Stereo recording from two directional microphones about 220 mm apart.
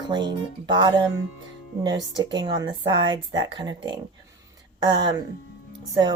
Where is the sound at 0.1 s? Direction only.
20° right (ahead or behind).